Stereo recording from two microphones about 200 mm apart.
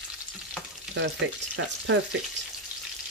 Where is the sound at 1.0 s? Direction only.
65° right (ahead or behind).